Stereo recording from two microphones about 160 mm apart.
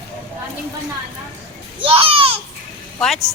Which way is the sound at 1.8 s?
35° right (ahead or behind).